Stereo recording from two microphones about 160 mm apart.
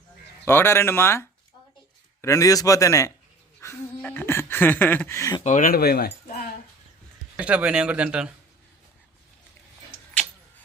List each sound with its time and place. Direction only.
0.4 s speech: 15° left (ahead or behind)
2.2 s a man's voice: 20° left (ahead or behind)
3.6 s a sound: 15° left (ahead or behind)
5.4 s speech: 50° left (ahead or behind); by 6.1 s 75° left (ahead or behind)
7.3 s speech: 5° right (ahead or behind)